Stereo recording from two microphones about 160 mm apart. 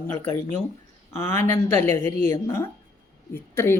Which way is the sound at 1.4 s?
15° left (ahead or behind).